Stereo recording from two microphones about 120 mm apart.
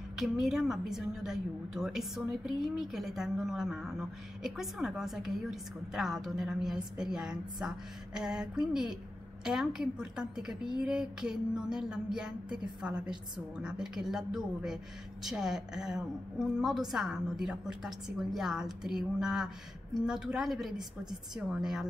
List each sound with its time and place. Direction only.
0.2 s a woman's voice: centre (ahead or behind)